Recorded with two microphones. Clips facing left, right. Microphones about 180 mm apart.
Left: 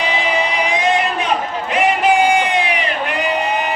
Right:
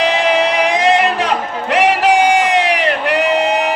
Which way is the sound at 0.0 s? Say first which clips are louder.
Right 5 dB; 85° right.